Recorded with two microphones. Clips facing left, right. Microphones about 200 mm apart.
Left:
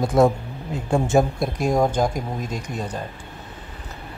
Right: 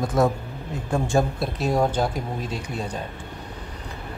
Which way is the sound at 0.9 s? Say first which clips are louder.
Left 3 dB; 20° left (ahead or behind).